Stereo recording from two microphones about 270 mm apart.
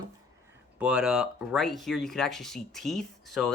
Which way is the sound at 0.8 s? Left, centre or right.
Centre.